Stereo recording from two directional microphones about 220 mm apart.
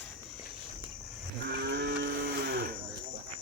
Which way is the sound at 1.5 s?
45° right (ahead or behind).